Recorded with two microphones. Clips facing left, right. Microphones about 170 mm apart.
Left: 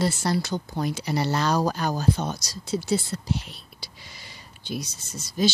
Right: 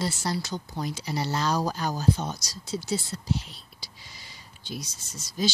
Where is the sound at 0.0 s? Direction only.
60° left (ahead or behind).